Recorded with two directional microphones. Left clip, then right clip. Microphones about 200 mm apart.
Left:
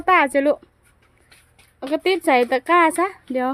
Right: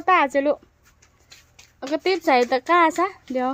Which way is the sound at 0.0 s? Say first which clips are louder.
Left 2 dB; 15° left (ahead or behind).